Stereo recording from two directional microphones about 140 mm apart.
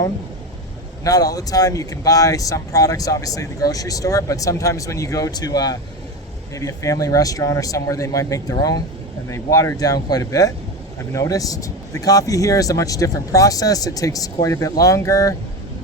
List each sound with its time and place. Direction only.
1.0 s speech: 25° left (ahead or behind)